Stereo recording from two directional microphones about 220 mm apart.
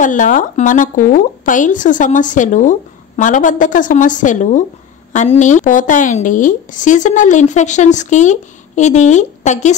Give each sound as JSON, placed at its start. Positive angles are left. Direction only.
{"t": 0.0, "sound": "a woman's voice", "side_deg": 35}